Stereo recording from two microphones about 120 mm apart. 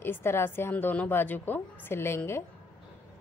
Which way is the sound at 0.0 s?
20° left (ahead or behind).